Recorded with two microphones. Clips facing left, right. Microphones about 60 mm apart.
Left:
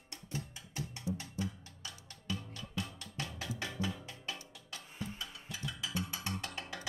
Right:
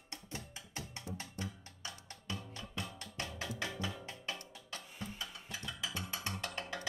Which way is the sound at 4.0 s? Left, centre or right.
Right.